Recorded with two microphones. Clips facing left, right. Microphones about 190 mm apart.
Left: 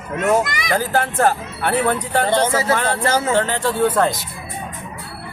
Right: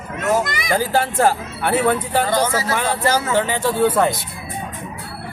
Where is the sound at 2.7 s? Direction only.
10° right (ahead or behind).